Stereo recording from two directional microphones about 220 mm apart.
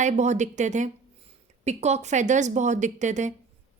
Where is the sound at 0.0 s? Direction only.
30° right (ahead or behind).